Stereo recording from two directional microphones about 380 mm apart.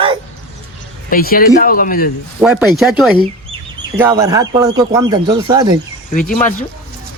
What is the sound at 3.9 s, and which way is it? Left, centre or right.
Speech, centre.